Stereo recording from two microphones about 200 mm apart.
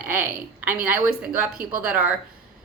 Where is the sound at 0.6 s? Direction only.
5° right (ahead or behind).